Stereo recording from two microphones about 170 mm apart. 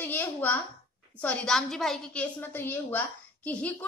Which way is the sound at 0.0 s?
10° left (ahead or behind).